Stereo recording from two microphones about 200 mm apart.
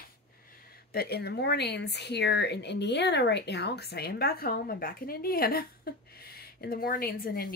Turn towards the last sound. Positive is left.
turn(degrees=50)  # may be behind; listen again after turning